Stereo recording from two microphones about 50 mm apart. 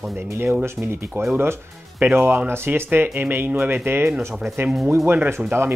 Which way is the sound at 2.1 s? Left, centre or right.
Right.